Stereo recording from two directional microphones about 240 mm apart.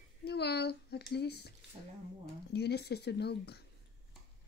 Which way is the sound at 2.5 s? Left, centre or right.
Left.